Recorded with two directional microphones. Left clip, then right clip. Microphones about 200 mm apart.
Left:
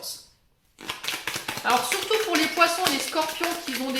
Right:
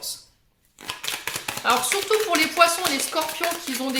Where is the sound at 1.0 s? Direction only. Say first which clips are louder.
Right 1 dB; 30° right (ahead or behind).